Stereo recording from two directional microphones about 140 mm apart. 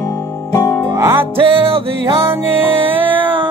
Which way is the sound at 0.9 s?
20° right (ahead or behind).